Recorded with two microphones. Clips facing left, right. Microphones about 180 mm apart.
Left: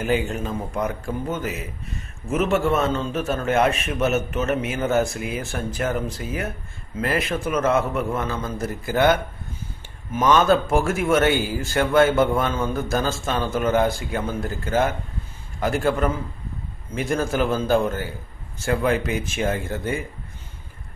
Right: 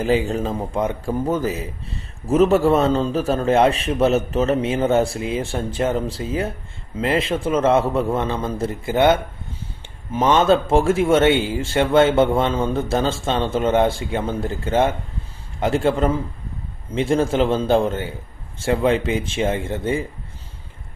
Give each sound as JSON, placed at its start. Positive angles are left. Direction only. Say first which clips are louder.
{"t": 0.0, "sound": "a man's voice", "louder": "right 4 dB", "side_deg": -30}